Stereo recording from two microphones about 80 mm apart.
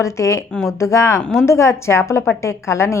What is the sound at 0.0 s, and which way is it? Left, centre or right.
A woman's voice, left.